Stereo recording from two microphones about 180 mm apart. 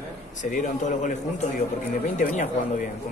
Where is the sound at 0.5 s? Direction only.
45° left (ahead or behind).